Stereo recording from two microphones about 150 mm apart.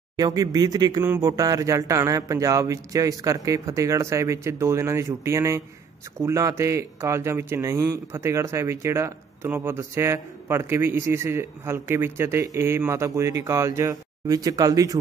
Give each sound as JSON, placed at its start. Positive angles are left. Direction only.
{"t": 0.2, "sound": "speech", "side_deg": -25}